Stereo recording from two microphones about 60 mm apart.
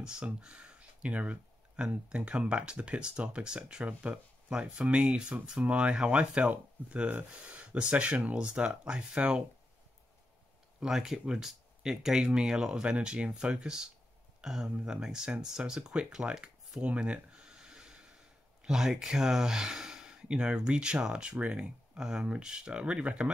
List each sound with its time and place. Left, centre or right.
0.0 s speech: centre
10.8 s speech: centre